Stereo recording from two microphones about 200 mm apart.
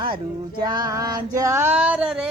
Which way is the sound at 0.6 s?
20° right (ahead or behind).